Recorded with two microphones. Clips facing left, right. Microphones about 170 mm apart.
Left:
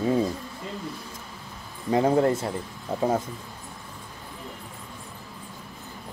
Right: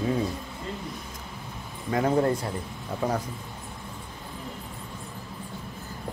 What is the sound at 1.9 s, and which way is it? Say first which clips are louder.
Speech: left 3 dB; 25° left (ahead or behind).